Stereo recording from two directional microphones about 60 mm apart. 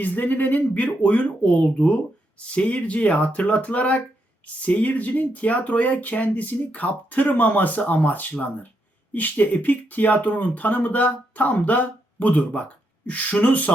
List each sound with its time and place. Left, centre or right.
0.0 s speech: left